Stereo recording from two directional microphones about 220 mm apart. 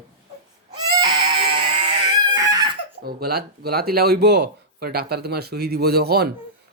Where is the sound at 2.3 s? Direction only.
15° right (ahead or behind).